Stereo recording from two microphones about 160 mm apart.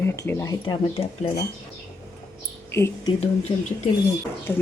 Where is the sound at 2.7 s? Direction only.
15° left (ahead or behind).